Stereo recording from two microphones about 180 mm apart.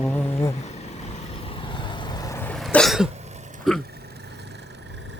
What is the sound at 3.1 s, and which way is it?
Throat clearing, 40° right (ahead or behind).